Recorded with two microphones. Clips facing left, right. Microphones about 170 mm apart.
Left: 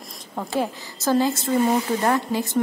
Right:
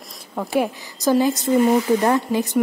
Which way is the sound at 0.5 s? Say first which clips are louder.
Right 4 dB; 15° right (ahead or behind).